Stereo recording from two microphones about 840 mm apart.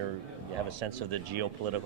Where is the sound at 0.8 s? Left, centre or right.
Right.